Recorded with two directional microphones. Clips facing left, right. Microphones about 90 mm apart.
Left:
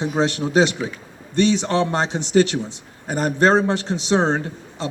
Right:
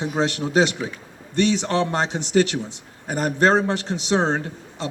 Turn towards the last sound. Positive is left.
turn(degrees=30)  # may be behind; listen again after turning